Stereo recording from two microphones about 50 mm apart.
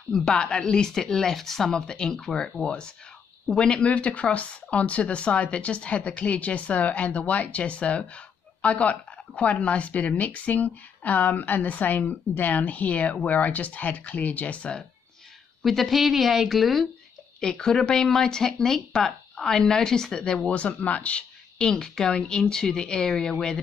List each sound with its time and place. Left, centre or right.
0.1 s speech: centre
3.5 s speech: centre
15.6 s speech: centre
17.4 s speech: centre
21.5 s speech: centre